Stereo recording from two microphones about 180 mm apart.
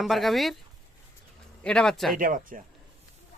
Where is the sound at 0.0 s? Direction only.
Centre (ahead or behind).